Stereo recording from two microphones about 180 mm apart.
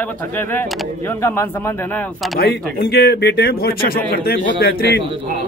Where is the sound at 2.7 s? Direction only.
65° left (ahead or behind).